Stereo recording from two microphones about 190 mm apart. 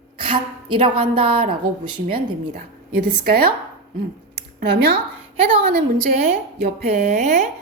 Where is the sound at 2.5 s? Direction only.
55° right (ahead or behind).